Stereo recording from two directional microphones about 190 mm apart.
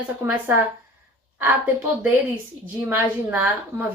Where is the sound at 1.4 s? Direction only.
10° right (ahead or behind).